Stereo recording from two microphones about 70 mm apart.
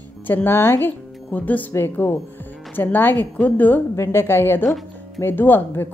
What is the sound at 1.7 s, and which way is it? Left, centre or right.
A woman's voice, left.